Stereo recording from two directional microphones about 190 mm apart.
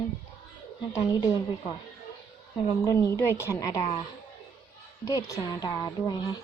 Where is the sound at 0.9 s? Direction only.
20° left (ahead or behind).